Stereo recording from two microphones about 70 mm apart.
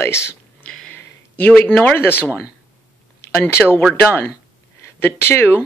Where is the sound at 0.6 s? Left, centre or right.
Centre.